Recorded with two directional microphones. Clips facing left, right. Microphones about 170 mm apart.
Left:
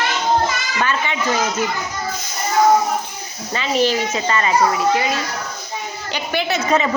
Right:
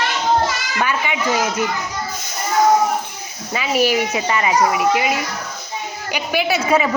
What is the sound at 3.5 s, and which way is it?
Speech, 10° right (ahead or behind).